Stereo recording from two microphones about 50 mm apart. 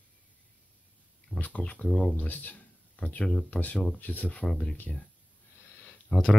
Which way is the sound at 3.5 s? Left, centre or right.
Left.